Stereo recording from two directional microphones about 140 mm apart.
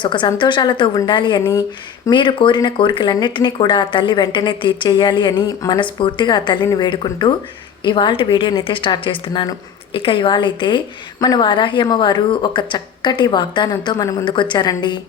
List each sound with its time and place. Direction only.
0.0 s speech: 35° left (ahead or behind)